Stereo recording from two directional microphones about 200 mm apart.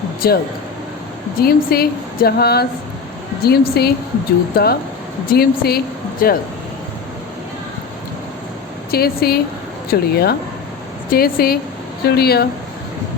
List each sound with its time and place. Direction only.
0.2 s speech: 50° left (ahead or behind)
8.9 s speech: 50° left (ahead or behind)